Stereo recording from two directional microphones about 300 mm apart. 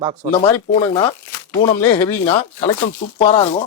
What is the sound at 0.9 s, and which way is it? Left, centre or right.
Speech, centre.